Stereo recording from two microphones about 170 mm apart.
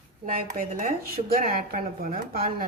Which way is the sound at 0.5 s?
50° right (ahead or behind).